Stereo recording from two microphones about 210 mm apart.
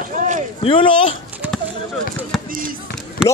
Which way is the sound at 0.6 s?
25° left (ahead or behind).